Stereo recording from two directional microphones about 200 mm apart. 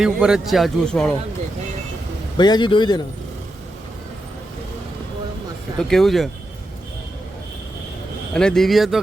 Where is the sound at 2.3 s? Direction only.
20° left (ahead or behind).